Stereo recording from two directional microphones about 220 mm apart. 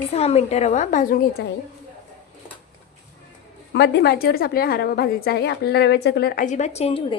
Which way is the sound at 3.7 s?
50° left (ahead or behind).